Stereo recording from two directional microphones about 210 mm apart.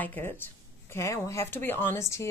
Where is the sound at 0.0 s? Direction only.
10° left (ahead or behind).